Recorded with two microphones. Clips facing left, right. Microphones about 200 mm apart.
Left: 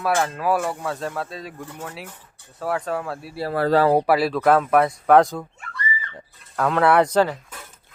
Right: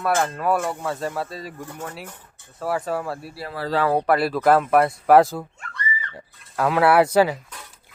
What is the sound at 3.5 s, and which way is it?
Speech, 50° left (ahead or behind).